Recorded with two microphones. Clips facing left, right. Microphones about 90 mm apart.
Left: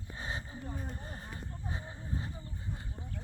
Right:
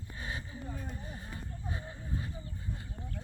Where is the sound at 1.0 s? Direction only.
40° left (ahead or behind).